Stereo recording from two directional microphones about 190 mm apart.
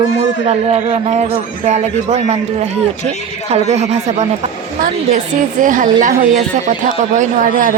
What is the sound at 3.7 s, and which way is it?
Speech, 35° right (ahead or behind).